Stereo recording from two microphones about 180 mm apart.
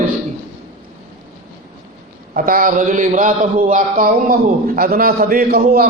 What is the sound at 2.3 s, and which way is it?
A man's voice, 50° right (ahead or behind).